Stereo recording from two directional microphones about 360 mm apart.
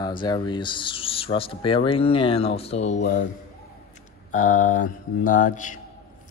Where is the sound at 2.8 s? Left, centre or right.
Left.